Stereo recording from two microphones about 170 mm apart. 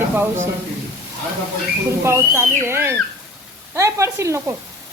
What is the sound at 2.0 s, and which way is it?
Speech, 15° right (ahead or behind).